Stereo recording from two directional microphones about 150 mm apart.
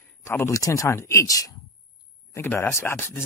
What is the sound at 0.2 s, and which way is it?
Speech, 20° left (ahead or behind).